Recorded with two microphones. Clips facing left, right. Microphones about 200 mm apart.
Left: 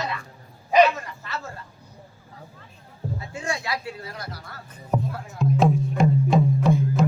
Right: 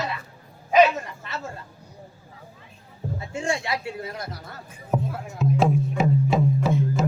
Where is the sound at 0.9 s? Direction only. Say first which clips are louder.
Right 1 dB; 25° right (ahead or behind).